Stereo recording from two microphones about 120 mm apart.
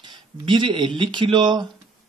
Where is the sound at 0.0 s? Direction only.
40° right (ahead or behind).